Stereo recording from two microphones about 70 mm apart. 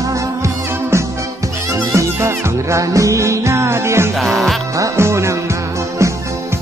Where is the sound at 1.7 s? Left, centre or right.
Right.